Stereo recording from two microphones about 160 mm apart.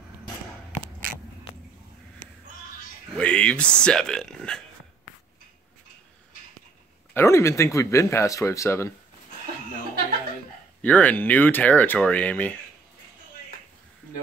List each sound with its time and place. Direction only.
3.2 s speech: 5° left (ahead or behind)
7.2 s speech: 15° left (ahead or behind)
10.8 s speech: 10° left (ahead or behind)